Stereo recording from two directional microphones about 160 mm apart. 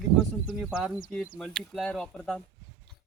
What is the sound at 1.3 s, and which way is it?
Speech, 5° left (ahead or behind).